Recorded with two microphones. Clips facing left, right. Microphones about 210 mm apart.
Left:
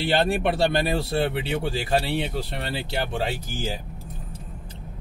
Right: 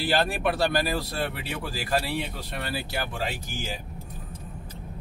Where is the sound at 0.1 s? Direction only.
25° left (ahead or behind).